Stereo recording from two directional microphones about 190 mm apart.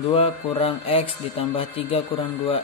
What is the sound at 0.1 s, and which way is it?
Speech, 30° left (ahead or behind).